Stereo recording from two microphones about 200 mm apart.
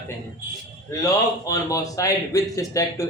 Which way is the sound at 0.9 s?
15° left (ahead or behind).